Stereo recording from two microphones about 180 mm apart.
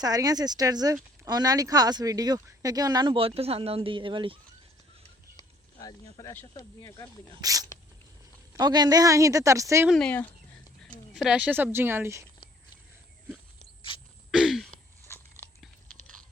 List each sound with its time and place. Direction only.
0.0 s speech: 20° right (ahead or behind)
5.4 s snake: 20° left (ahead or behind)
6.5 s speech: 20° left (ahead or behind)
7.4 s a woman's voice: 20° right (ahead or behind)
9.9 s speech: 5° left (ahead or behind)
11.1 s a woman's voice: 5° right (ahead or behind)
14.3 s a sound: centre (ahead or behind)